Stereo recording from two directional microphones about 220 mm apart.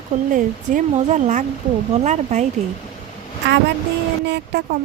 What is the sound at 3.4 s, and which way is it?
Speech, 50° right (ahead or behind).